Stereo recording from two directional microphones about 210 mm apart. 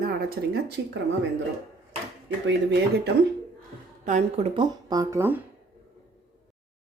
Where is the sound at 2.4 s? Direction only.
55° right (ahead or behind).